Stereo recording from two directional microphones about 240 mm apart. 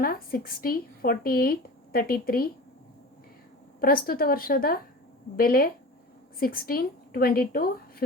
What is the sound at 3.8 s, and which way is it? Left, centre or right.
A woman's voice, left.